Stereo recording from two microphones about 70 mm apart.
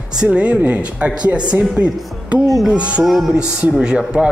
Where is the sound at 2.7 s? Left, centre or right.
Centre.